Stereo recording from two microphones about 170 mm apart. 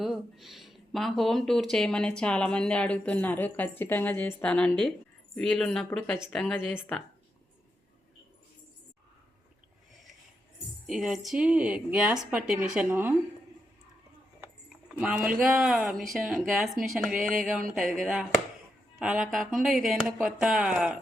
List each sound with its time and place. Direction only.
0.0 s speech: centre (ahead or behind)
10.8 s a woman's voice: 5° right (ahead or behind)
14.8 s speech: 5° right (ahead or behind)